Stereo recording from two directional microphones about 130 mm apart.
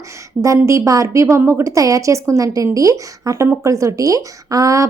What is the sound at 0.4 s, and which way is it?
A woman's voice, 25° right (ahead or behind).